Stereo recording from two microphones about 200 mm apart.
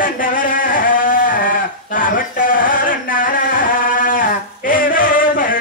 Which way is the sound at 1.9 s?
45° left (ahead or behind).